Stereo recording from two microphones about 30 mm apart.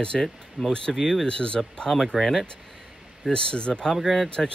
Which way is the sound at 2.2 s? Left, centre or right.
Centre.